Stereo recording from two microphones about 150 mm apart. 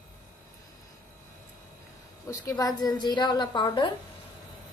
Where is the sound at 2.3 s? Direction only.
25° left (ahead or behind).